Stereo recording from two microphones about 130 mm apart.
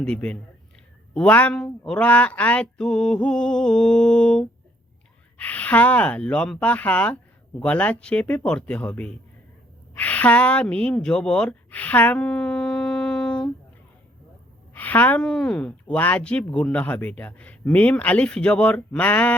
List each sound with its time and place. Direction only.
0.0 s a woman's voice: 10° left (ahead or behind)
14.7 s a woman's voice: 15° left (ahead or behind)